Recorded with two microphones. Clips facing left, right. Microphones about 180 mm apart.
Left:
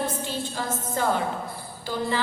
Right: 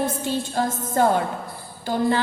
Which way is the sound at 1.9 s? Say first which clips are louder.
Right 6 dB; 50° right (ahead or behind).